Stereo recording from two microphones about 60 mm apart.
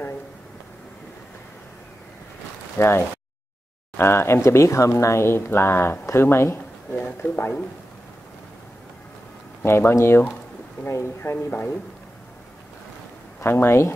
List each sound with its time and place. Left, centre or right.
2.8 s speech: left
9.7 s speech: left
13.4 s speech: left